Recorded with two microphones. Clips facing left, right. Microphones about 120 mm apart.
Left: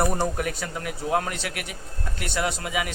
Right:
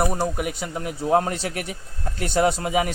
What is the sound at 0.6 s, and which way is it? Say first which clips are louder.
A man's voice: right 3 dB; 25° right (ahead or behind).